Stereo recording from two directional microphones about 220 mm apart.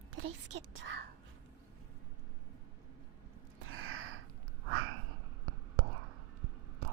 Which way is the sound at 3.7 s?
70° right (ahead or behind).